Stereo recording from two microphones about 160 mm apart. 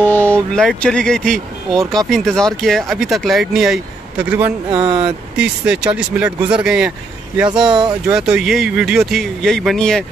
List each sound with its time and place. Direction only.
0.0 s speech: 10° left (ahead or behind); by 4.6 s 10° right (ahead or behind)
4.6 s speech: 30° right (ahead or behind)
5.0 s speech: 5° right (ahead or behind)
7.4 s speech: 30° right (ahead or behind)
8.1 s speech: 5° right (ahead or behind)